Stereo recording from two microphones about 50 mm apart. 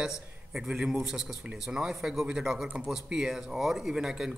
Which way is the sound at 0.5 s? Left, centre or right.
Centre.